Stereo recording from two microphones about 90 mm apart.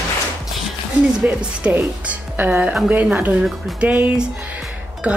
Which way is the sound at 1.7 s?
20° right (ahead or behind).